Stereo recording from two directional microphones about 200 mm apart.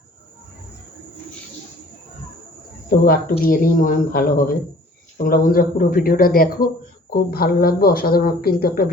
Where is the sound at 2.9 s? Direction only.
45° left (ahead or behind).